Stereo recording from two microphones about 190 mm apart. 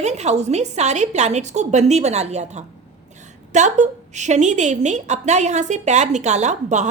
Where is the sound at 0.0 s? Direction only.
35° right (ahead or behind).